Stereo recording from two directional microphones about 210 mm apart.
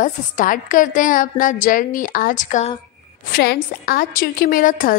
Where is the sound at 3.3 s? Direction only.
45° left (ahead or behind).